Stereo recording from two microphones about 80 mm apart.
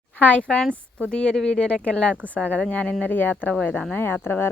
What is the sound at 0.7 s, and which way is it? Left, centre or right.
Speech, right.